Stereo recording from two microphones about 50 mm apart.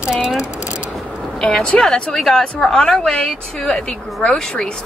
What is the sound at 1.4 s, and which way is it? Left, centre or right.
Speech, centre.